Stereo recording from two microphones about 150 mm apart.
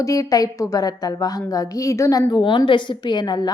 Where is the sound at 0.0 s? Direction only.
20° left (ahead or behind).